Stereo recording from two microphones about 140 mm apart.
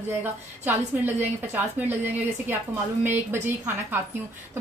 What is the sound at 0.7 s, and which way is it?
A woman's voice, 15° right (ahead or behind).